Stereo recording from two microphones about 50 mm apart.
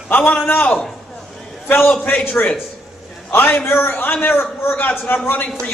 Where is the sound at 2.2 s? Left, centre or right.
Left.